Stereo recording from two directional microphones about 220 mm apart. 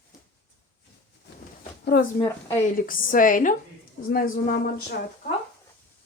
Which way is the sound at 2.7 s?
40° left (ahead or behind).